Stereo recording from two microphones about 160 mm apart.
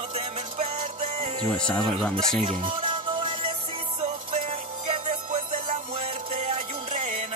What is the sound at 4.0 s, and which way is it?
Music, 55° right (ahead or behind).